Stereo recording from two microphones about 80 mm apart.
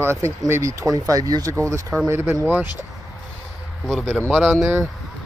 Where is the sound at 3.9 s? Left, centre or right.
Centre.